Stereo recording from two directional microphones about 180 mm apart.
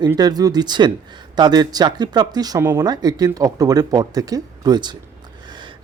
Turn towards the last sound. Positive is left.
turn(degrees=-25)  # may be behind; listen again after turning